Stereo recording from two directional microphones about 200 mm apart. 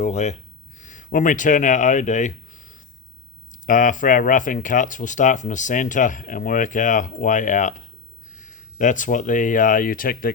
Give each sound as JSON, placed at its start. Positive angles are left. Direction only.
{"t": 0.0, "sound": "speech", "side_deg": 35}